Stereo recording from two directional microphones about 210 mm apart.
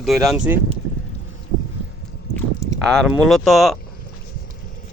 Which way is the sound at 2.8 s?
Centre (ahead or behind).